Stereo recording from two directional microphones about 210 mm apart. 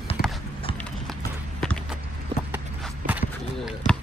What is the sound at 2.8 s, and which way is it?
Run, 5° right (ahead or behind).